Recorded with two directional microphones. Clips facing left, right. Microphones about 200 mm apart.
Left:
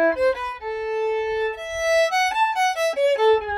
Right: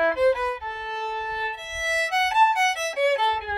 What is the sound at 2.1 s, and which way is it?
Violin, 45° left (ahead or behind).